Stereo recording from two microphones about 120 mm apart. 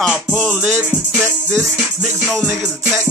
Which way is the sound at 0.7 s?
20° right (ahead or behind).